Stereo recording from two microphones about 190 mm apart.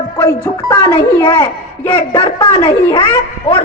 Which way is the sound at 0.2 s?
15° left (ahead or behind).